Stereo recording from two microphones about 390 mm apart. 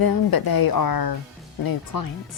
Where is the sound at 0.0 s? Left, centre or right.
Left.